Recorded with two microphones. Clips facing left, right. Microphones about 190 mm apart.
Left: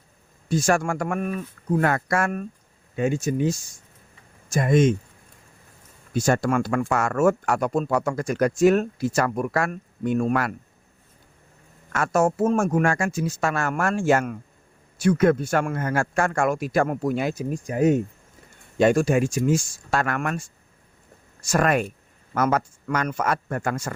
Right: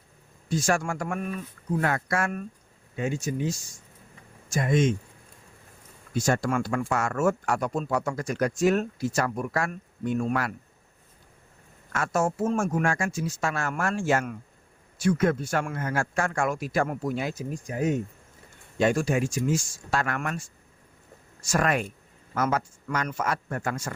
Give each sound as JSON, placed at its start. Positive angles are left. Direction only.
{"t": 0.5, "sound": "speech", "side_deg": 55}
{"t": 6.2, "sound": "speech", "side_deg": 55}
{"t": 11.9, "sound": "speech", "side_deg": 60}
{"t": 21.5, "sound": "speech", "side_deg": 50}